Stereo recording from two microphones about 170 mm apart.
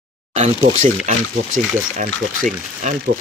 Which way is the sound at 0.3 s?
40° right (ahead or behind).